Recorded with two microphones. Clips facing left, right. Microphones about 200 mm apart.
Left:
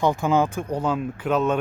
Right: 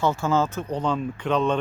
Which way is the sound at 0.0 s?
15° left (ahead or behind).